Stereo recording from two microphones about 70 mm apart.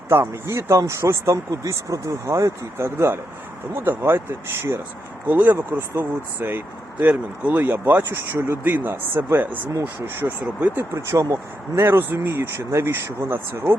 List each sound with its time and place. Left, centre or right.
0.1 s speech: right
0.8 s speech: right
5.3 s speech: right
10.9 s speech: right
11.8 s speech: right